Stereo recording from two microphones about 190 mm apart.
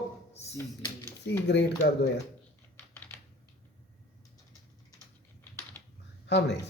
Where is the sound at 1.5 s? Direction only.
65° left (ahead or behind).